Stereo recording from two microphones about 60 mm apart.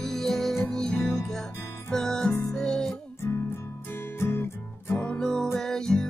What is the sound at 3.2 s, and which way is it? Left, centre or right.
Music, left.